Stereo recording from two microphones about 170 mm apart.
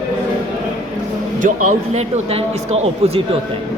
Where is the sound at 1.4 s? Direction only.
50° right (ahead or behind).